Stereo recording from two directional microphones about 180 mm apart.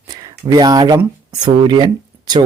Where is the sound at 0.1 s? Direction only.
20° right (ahead or behind).